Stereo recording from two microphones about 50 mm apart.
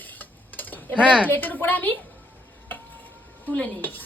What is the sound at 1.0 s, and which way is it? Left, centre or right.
Speech, right.